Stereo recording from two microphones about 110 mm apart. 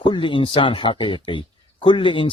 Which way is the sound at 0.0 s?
50° left (ahead or behind).